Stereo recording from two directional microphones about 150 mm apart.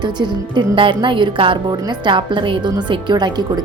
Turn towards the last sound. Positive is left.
turn(degrees=-30)  # may be behind; listen again after turning